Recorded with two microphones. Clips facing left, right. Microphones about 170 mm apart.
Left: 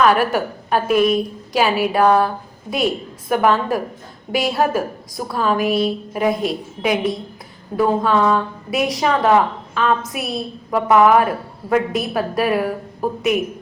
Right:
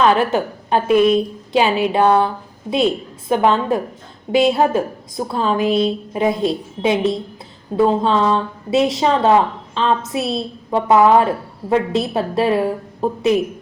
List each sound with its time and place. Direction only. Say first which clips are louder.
0.0 s a woman's voice: right 1 dB; 25° right (ahead or behind)